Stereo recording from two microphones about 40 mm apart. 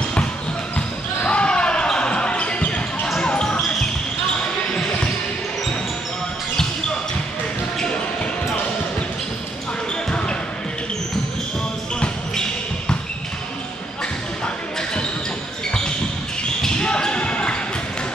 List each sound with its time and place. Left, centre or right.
0.7 s basketball bounce: left
3.2 s basketball bounce: left
16.6 s basketball bounce: left